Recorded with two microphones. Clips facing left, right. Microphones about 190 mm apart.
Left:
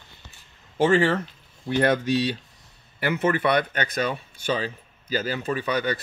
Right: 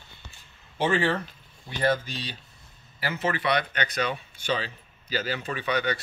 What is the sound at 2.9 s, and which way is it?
Speech, 55° left (ahead or behind).